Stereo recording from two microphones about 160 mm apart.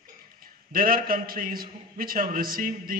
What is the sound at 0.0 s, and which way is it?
A man's voice, 65° right (ahead or behind).